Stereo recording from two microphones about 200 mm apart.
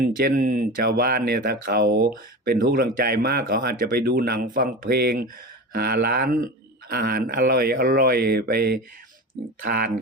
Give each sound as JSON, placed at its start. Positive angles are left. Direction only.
{"t": 0.0, "sound": "speech", "side_deg": -45}